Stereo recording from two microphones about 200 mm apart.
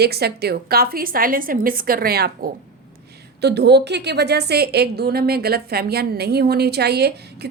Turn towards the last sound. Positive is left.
turn(degrees=-55)  # may be behind; listen again after turning